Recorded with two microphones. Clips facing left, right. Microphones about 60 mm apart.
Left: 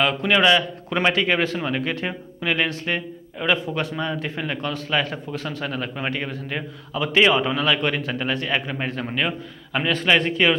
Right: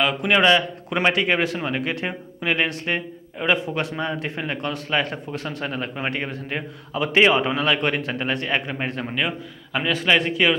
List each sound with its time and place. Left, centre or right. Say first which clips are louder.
0.0 s a man's voice: left 1 dB; centre
0.3 s a man's voice: right 1 dB; right
0.8 s a man's voice: even; centre
3.5 s a man's voice: even; right
4.9 s a man's voice: even; centre
9.0 s speech: left 1 dB; centre